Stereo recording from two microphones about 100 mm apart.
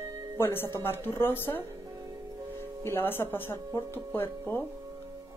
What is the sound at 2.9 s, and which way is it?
Speech, 20° left (ahead or behind).